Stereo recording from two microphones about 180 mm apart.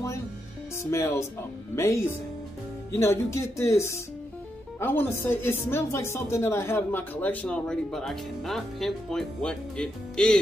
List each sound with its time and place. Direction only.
0.8 s speech: 15° left (ahead or behind)